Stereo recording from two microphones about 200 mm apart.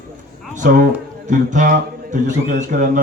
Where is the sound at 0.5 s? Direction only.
40° right (ahead or behind).